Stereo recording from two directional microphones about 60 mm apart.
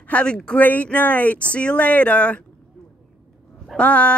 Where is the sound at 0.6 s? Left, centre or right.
Left.